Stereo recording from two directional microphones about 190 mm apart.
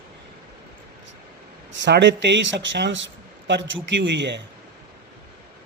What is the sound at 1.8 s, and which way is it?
Speech, 70° right (ahead or behind).